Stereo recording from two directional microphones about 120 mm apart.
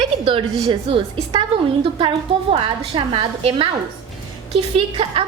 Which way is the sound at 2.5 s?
50° right (ahead or behind).